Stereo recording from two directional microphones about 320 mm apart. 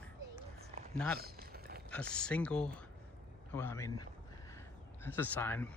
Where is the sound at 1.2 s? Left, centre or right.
Right.